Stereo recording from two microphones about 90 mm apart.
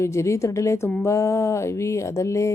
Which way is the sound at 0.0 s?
35° left (ahead or behind).